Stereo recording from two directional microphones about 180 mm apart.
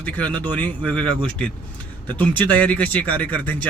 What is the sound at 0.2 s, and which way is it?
Speech, 25° right (ahead or behind).